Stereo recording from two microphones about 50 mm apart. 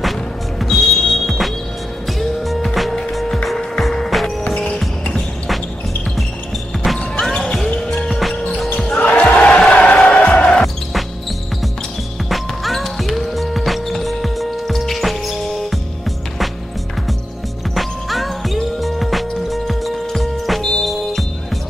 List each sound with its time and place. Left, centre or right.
0.6 s music: centre
4.5 s music: left
7.2 s basketball bounce: centre
7.9 s music: centre
8.7 s basketball bounce: left
9.6 s a sound: centre
9.8 s music: left
10.6 s music: centre
12.3 s music: centre
17.7 s music: centre